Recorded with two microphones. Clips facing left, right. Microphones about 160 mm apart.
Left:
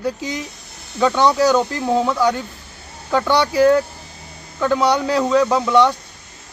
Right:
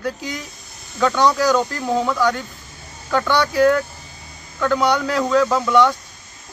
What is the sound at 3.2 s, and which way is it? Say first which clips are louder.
Speech: left 1 dB; 25° left (ahead or behind).